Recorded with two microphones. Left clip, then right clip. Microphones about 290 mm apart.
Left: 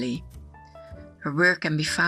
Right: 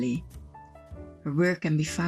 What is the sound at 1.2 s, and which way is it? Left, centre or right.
Speech, left.